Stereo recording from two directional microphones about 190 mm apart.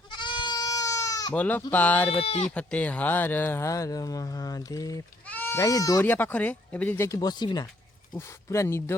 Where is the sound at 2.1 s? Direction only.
30° left (ahead or behind).